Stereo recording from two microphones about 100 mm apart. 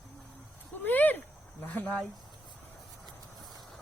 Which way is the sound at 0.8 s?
20° left (ahead or behind).